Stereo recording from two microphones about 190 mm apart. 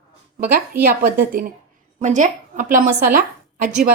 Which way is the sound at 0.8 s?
50° right (ahead or behind).